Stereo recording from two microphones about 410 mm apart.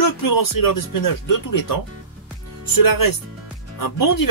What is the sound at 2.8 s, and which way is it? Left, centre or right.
Speech, left.